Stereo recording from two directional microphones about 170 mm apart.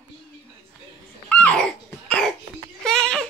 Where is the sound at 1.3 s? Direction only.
10° left (ahead or behind).